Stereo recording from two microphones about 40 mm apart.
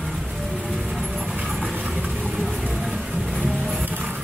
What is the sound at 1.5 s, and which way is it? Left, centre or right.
Train, centre.